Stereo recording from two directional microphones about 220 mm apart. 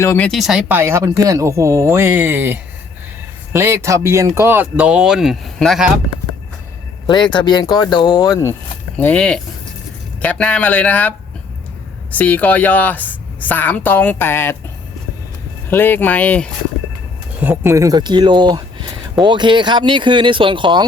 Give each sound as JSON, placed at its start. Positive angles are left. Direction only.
{"t": 0.0, "sound": "speech", "side_deg": 10}
{"t": 7.1, "sound": "a woman's voice", "side_deg": 20}
{"t": 12.1, "sound": "a woman's voice", "side_deg": 10}
{"t": 15.7, "sound": "a woman's voice", "side_deg": 10}
{"t": 17.4, "sound": "speech", "side_deg": -10}